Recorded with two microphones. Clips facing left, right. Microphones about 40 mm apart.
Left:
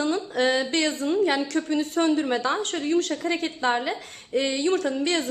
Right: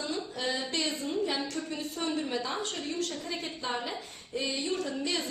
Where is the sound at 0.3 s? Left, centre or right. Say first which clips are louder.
Left 10 dB; left.